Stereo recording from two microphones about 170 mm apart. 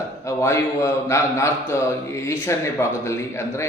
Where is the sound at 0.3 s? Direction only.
15° left (ahead or behind).